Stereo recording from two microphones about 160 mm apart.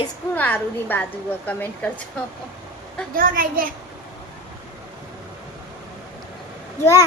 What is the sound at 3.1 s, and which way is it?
Speech, 60° right (ahead or behind).